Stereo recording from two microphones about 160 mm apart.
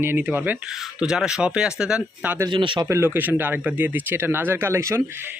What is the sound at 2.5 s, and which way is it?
Speech, 30° right (ahead or behind).